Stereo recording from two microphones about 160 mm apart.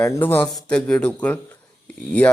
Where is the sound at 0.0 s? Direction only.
15° left (ahead or behind).